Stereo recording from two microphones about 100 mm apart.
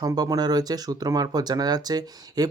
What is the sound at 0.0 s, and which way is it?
Speech, 35° right (ahead or behind).